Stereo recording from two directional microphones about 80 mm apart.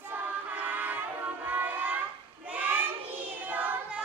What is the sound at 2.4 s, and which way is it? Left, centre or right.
Child singing, centre.